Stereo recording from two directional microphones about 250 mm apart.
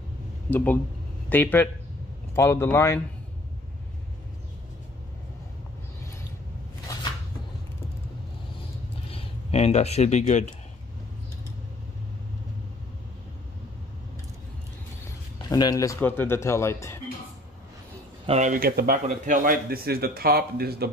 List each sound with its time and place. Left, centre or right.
0.5 s speech: centre
9.1 s speech: left
15.5 s speech: centre
18.2 s a man's voice: right